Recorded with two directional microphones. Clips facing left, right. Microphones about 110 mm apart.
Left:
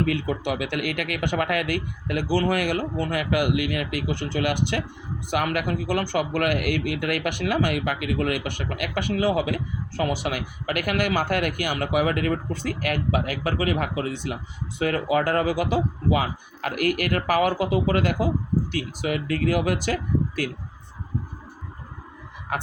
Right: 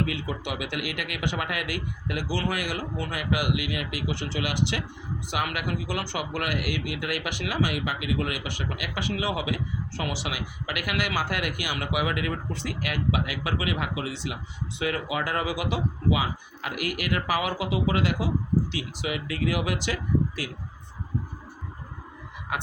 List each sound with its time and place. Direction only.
0.0 s speech: 50° left (ahead or behind)